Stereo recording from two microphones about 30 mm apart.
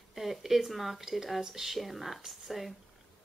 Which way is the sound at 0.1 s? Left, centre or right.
Centre.